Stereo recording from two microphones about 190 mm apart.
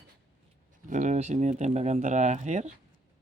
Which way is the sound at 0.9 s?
40° right (ahead or behind).